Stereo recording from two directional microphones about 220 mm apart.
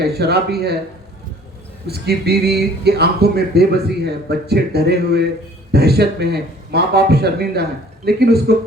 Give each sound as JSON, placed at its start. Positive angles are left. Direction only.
{"t": 0.0, "sound": "a man's voice", "side_deg": -50}
{"t": 1.9, "sound": "a man's voice", "side_deg": -45}